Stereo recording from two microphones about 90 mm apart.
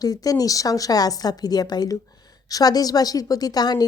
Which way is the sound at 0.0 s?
45° left (ahead or behind).